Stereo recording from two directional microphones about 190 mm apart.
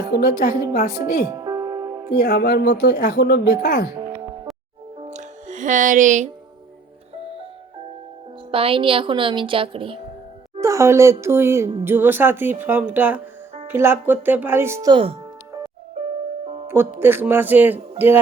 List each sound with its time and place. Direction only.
0.2 s a woman's voice: 50° left (ahead or behind)
1.3 s music: 20° right (ahead or behind)
2.1 s speech: 55° left (ahead or behind)
4.9 s music: 35° right (ahead or behind)
8.4 s speech: 30° right (ahead or behind)
10.6 s speech: 15° right (ahead or behind)
16.0 s music: 30° right (ahead or behind)
16.6 s speech: 10° right (ahead or behind)